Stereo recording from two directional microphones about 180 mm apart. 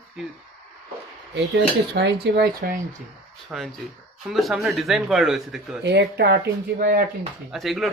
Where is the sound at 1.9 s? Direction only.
65° right (ahead or behind).